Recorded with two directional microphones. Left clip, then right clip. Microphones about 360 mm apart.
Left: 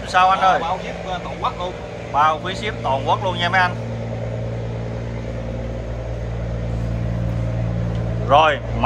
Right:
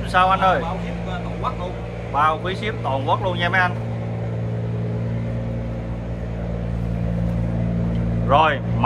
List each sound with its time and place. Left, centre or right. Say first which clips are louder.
0.1 s speech: left 2 dB; centre
2.1 s speech: left 2 dB; centre
8.3 s speech: left 2 dB; centre